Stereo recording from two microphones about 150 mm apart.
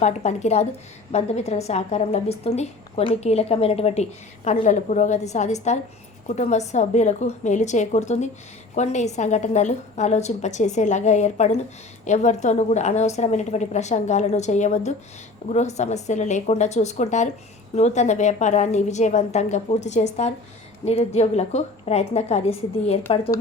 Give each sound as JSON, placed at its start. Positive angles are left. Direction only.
{"t": 0.0, "sound": "a woman's voice", "side_deg": 50}